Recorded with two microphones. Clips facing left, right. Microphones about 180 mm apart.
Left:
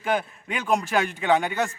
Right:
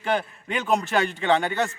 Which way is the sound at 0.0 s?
5° left (ahead or behind).